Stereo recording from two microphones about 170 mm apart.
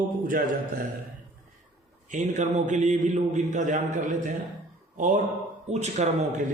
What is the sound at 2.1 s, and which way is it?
A man's voice, 45° right (ahead or behind).